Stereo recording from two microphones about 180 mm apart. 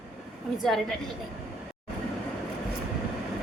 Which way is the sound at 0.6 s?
Centre (ahead or behind).